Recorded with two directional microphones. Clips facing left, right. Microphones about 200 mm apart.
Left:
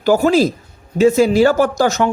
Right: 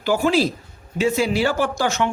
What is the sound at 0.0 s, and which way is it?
Speech, 40° left (ahead or behind).